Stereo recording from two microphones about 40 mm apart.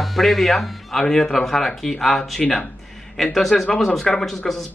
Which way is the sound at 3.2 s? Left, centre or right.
Centre.